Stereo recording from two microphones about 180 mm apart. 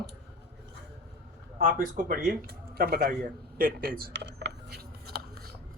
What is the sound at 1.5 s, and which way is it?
Speech, 50° right (ahead or behind).